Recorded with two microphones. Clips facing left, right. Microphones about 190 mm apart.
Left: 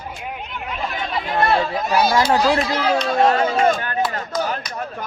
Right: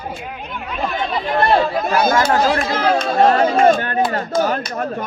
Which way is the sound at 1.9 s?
50° right (ahead or behind).